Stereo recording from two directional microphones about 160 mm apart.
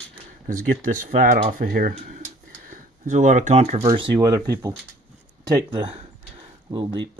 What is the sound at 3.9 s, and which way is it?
Speech, 25° right (ahead or behind).